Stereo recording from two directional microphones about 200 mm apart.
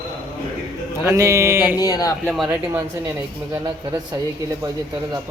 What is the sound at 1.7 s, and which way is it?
Speech, 20° left (ahead or behind).